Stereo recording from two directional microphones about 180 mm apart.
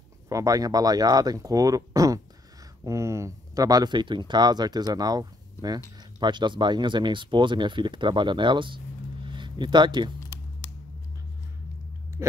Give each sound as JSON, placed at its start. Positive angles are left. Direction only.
{"t": 0.3, "sound": "speech", "side_deg": -20}
{"t": 12.2, "sound": "speech", "side_deg": -15}